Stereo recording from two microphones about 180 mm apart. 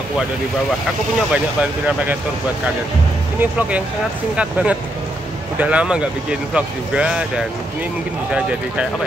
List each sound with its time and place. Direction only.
1.3 s speech: 5° right (ahead or behind)
3.3 s speech: 10° right (ahead or behind)